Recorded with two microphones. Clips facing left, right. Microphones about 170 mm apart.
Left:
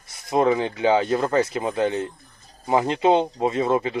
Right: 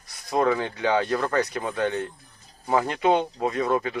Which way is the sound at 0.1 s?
25° left (ahead or behind).